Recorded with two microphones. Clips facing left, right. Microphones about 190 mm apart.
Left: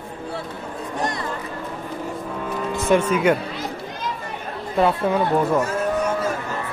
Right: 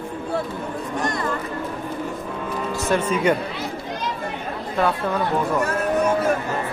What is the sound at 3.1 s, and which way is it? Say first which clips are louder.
Speech: left 1 dB; 5° left (ahead or behind).